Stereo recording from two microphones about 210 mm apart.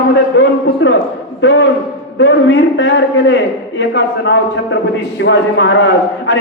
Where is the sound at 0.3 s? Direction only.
55° left (ahead or behind).